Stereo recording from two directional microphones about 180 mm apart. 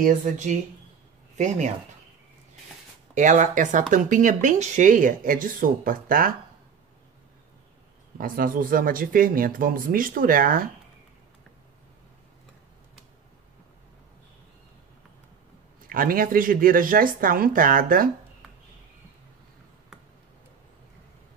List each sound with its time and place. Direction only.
0.0 s speech: 45° right (ahead or behind)
3.2 s speech: 45° right (ahead or behind)
8.2 s speech: 50° right (ahead or behind)
15.9 s speech: 50° right (ahead or behind)